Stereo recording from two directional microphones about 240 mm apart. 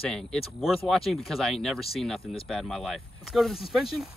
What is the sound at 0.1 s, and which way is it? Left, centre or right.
Speech, centre.